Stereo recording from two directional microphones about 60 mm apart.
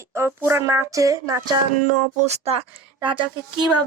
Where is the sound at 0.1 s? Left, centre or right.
Right.